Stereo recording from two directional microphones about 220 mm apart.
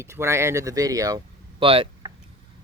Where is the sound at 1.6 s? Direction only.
25° right (ahead or behind).